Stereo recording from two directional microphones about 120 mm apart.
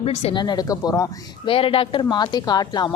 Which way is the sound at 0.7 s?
30° left (ahead or behind).